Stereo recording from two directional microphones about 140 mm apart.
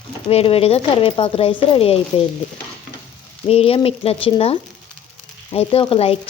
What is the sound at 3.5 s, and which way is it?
Speech, 45° left (ahead or behind).